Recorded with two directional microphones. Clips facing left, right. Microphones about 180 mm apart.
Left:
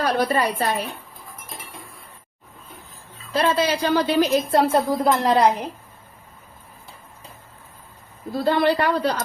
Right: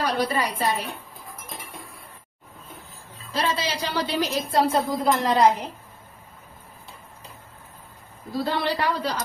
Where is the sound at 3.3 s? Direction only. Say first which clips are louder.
Left 6 dB; 55° left (ahead or behind).